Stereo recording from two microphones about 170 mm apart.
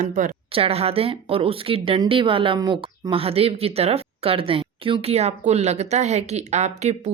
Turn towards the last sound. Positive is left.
turn(degrees=-45)  # may be behind; listen again after turning